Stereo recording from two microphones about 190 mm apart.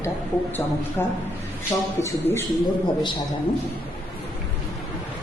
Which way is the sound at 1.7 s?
20° left (ahead or behind).